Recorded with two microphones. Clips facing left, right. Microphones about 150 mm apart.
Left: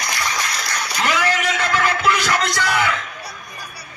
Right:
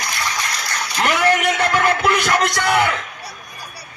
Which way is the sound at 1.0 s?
60° right (ahead or behind).